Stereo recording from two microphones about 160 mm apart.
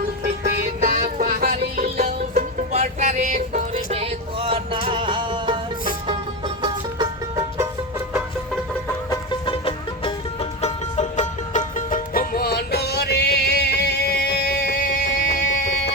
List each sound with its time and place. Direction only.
0.8 s music: 55° right (ahead or behind)
2.6 s music: 50° right (ahead or behind); by 7.4 s 30° right (ahead or behind)
7.6 s music: 15° right (ahead or behind)
9.0 s music: 30° left (ahead or behind)
10.6 s music: 45° left (ahead or behind); by 14.8 s 80° left
15.0 s music: 50° left (ahead or behind)